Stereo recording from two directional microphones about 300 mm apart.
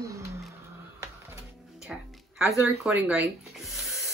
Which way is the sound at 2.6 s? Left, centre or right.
Centre.